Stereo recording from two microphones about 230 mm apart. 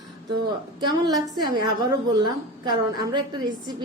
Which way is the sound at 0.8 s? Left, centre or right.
Centre.